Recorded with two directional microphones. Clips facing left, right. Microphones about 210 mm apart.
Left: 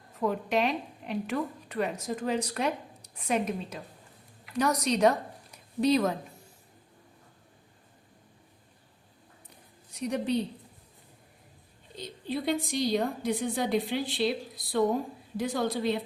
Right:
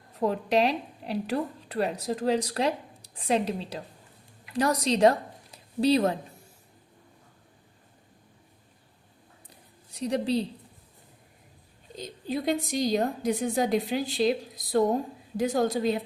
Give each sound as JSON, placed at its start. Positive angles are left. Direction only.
{"t": 0.2, "sound": "a woman's voice", "side_deg": -35}
{"t": 9.9, "sound": "a woman's voice", "side_deg": -30}
{"t": 11.9, "sound": "a woman's voice", "side_deg": -45}